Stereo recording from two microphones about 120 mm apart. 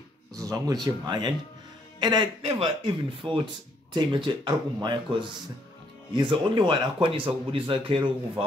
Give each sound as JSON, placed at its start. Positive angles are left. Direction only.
{"t": 0.3, "sound": "a man's voice", "side_deg": -30}